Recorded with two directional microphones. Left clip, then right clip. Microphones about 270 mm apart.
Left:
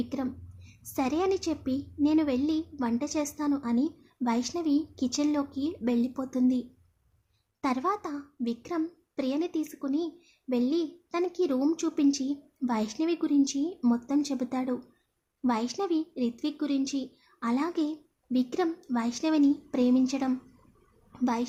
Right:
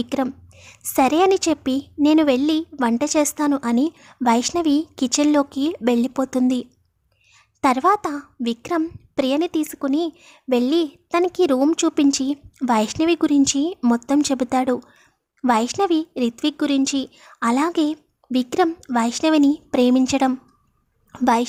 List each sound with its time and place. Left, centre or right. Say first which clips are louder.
0.0 s a woman's voice: right 10 dB; right